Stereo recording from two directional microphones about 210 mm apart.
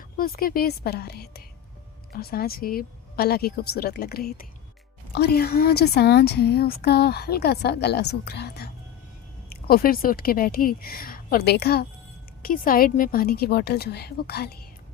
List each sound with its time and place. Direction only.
0.2 s a woman's voice: 45° left (ahead or behind)